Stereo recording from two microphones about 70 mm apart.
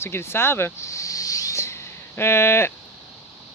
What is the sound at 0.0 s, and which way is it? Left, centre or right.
Speech, left.